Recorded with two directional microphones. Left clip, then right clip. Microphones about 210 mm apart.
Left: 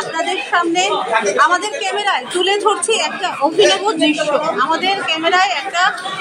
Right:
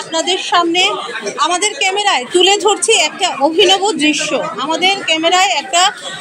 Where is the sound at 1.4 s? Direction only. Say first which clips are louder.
Even; 35° right (ahead or behind).